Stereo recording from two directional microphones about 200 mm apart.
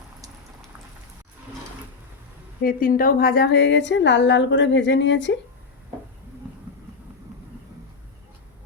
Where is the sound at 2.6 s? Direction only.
45° left (ahead or behind); by 5.4 s 65° left (ahead or behind).